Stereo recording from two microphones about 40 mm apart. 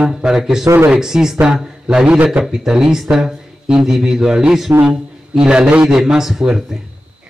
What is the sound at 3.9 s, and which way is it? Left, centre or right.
Speech, centre.